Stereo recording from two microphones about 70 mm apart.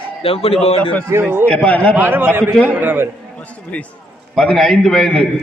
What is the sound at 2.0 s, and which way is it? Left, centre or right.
A man's voice, right.